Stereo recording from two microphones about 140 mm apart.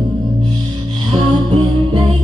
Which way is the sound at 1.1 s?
40° right (ahead or behind).